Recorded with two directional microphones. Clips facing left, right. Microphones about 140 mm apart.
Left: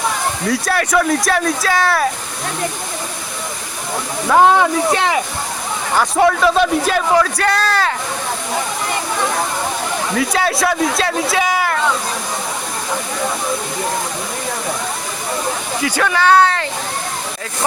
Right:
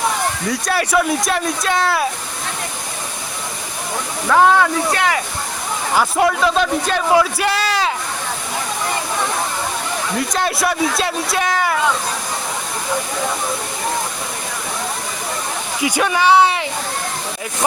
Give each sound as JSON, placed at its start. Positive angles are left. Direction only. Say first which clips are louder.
{"t": 0.4, "sound": "a man's voice", "louder": "left 5 dB", "side_deg": 0}
{"t": 4.3, "sound": "speech", "louder": "left 2 dB", "side_deg": 20}
{"t": 5.9, "sound": "a man's voice", "louder": "left 2 dB", "side_deg": -5}
{"t": 7.2, "sound": "speech", "louder": "left 1 dB", "side_deg": -10}
{"t": 10.2, "sound": "a man's voice", "louder": "left 3 dB", "side_deg": 0}
{"t": 15.8, "sound": "speech", "louder": "even", "side_deg": -15}